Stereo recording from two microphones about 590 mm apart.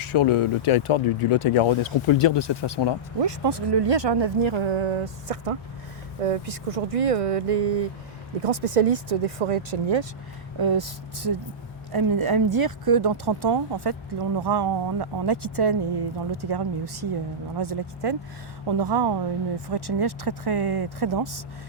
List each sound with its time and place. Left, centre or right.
0.0 s speech: left
3.2 s speech: right
10.6 s speech: right